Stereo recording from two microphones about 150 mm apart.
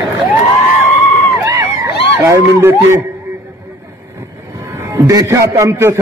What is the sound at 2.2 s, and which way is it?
Speech, 15° right (ahead or behind).